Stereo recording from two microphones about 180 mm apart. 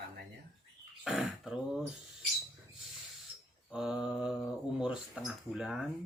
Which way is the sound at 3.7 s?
5° right (ahead or behind).